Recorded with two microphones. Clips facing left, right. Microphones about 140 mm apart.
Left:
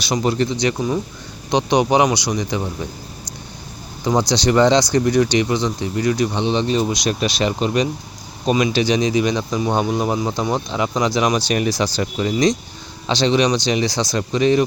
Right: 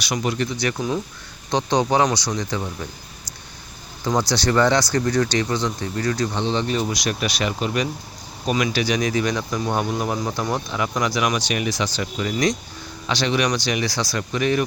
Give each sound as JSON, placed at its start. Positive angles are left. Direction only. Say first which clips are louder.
{"t": 0.0, "sound": "speech", "louder": "left 5 dB", "side_deg": 30}
{"t": 0.5, "sound": "speech", "louder": "left 4 dB", "side_deg": 20}
{"t": 4.0, "sound": "speech", "louder": "left 4 dB", "side_deg": 15}